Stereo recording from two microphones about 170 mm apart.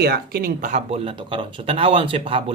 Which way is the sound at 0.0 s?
65° right (ahead or behind).